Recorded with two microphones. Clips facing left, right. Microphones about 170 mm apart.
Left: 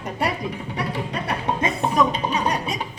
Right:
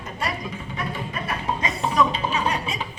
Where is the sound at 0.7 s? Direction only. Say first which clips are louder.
Left 2 dB; 75° left (ahead or behind).